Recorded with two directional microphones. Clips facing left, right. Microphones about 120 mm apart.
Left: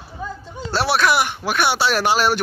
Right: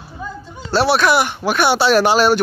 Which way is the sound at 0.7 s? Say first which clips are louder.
Right 4 dB; 30° right (ahead or behind).